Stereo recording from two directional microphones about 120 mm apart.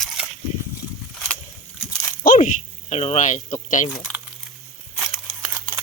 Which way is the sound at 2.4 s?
70° left (ahead or behind).